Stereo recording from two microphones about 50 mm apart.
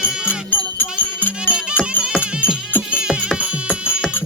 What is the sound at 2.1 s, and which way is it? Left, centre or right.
Music, left.